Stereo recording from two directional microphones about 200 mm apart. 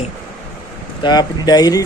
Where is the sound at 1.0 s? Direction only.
20° left (ahead or behind).